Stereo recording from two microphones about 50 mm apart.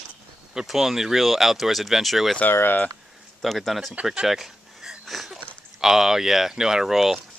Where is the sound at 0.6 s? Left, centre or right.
Centre.